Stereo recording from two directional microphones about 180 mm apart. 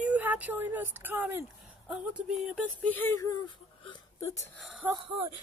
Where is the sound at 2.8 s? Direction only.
10° left (ahead or behind).